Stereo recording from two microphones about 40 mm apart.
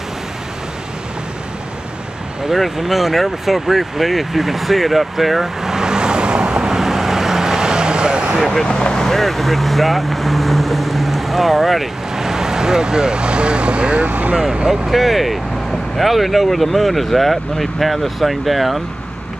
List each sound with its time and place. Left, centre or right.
2.5 s vehicle: centre; by 8.4 s right
8.6 s speech: centre
12.2 s speech: centre
14.0 s speech: right
14.3 s speech: centre
14.7 s speech: centre